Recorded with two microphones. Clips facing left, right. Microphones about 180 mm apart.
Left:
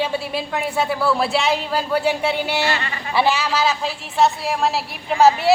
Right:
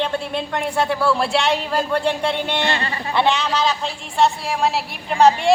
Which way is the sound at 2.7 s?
35° right (ahead or behind).